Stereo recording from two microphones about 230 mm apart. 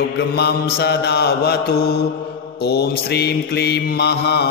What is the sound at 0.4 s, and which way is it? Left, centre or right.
Mantra, left.